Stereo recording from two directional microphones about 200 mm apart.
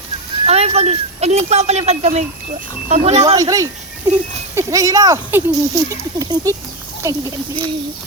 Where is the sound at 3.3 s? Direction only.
15° right (ahead or behind).